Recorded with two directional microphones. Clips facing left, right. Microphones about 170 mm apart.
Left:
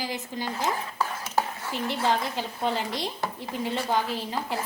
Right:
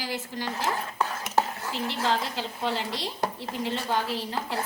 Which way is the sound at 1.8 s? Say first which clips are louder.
Left 2 dB; 15° left (ahead or behind).